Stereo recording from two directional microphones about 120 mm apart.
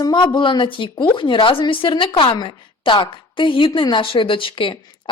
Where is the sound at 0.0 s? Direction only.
35° left (ahead or behind).